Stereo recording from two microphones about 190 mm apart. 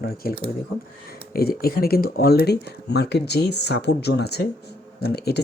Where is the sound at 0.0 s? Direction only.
50° left (ahead or behind).